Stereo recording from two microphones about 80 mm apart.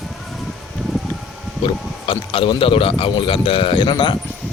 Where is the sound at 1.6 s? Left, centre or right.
Left.